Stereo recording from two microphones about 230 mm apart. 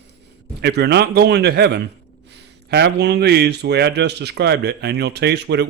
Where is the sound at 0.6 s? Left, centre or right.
Right.